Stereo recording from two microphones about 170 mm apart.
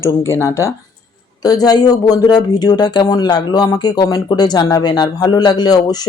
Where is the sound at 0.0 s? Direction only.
15° left (ahead or behind).